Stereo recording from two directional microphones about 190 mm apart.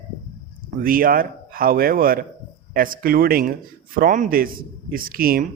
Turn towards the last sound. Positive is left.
turn(degrees=-50)  # may be behind; listen again after turning